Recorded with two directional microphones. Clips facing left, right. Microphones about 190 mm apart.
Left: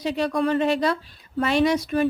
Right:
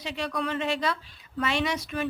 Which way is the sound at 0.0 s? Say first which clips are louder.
Left 8 dB; 40° left (ahead or behind).